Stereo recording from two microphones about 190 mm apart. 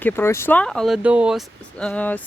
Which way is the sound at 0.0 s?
15° left (ahead or behind).